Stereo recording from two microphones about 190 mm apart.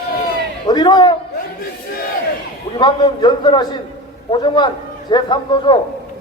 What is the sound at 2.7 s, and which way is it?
A man's voice, 25° left (ahead or behind).